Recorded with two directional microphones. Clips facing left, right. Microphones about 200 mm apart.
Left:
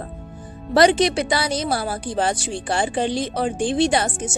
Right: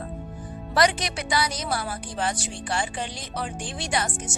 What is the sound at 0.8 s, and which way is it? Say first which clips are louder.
A woman's voice: left 8 dB; 25° left (ahead or behind).